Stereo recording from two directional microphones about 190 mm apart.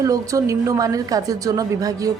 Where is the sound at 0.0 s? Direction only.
15° right (ahead or behind).